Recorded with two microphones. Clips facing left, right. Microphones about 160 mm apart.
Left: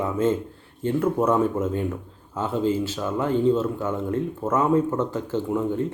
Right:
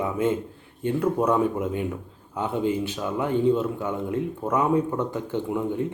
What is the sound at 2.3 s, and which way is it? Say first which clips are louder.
Speech: left 1 dB; 15° right (ahead or behind).